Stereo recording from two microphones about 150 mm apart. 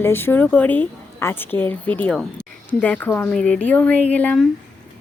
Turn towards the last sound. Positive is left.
turn(degrees=10)  # may be behind; listen again after turning